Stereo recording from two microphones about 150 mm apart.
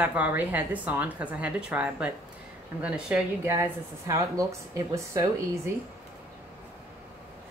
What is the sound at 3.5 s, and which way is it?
Speech, 20° right (ahead or behind).